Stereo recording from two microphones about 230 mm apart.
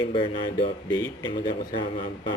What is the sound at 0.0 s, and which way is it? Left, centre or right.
Speech, left.